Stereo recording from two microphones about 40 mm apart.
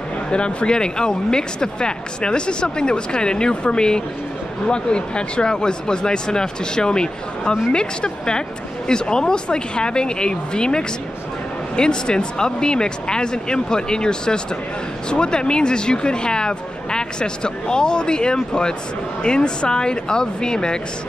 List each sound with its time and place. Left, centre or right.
0.3 s speech: left